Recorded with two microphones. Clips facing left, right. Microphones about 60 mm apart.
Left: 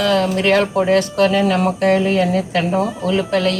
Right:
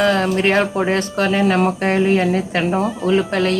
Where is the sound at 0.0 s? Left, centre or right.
Right.